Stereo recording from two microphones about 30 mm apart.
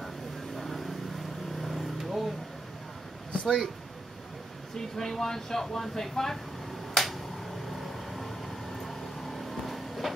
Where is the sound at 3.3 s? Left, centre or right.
Left.